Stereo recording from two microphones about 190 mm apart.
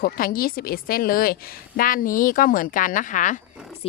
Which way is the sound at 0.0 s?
50° left (ahead or behind).